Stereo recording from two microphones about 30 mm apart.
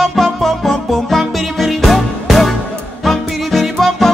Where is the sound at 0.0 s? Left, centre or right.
Centre.